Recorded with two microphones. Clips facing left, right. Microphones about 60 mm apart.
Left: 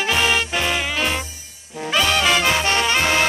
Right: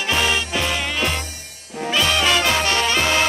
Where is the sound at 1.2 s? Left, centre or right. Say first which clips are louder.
Right 2 dB; right.